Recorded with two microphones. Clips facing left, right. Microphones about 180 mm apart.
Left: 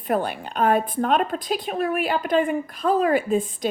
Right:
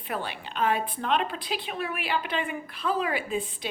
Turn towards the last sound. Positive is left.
turn(degrees=45)  # may be behind; listen again after turning